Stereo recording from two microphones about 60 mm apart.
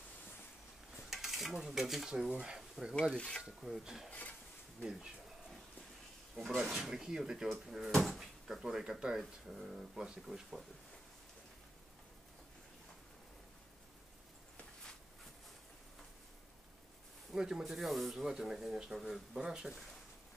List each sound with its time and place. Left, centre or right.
1.1 s stir: centre
2.0 s speech: centre
3.2 s filing: centre
3.4 s speech: centre
4.1 s a sound: left
6.6 s speech: centre
7.9 s filing: centre
8.2 s speech: centre
17.3 s speech: centre